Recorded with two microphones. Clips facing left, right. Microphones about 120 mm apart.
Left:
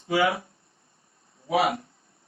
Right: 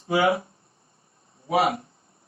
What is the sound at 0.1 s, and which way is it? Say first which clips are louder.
Speech: right 2 dB; 25° right (ahead or behind).